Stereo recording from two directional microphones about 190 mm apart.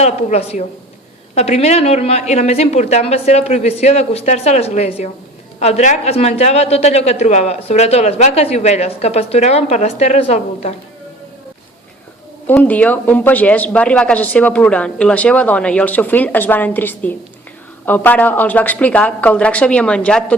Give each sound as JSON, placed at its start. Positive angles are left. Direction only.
{"t": 0.0, "sound": "a woman's voice", "side_deg": 35}
{"t": 12.5, "sound": "speech", "side_deg": 10}